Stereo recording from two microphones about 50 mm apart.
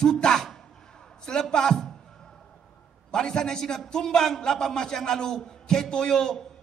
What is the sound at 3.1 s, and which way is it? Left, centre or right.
A man's voice, centre.